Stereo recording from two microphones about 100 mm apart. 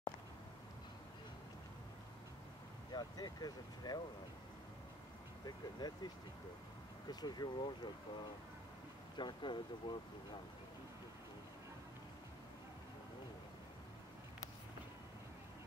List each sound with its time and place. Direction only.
2.9 s speech: 40° left (ahead or behind)
5.4 s speech: 45° left (ahead or behind)
7.1 s speech: 45° left (ahead or behind)
9.1 s speech: 50° left (ahead or behind)